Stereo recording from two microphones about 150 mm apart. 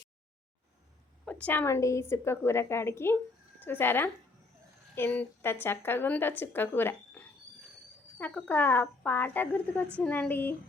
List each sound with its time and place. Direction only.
1.2 s speech: 10° left (ahead or behind)